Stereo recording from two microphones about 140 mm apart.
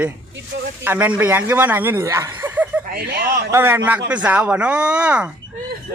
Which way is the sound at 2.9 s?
90° right.